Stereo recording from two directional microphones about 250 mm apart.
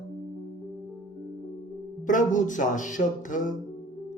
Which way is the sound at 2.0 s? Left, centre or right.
Left.